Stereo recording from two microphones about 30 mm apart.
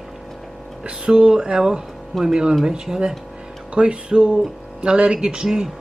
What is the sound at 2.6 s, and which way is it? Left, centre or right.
Speech, right.